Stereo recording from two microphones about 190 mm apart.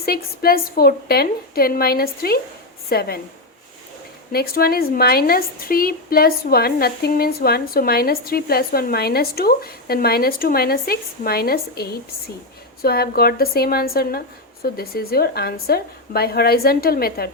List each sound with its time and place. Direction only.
0.0 s a woman's voice: 50° left (ahead or behind)
4.3 s speech: 55° left (ahead or behind)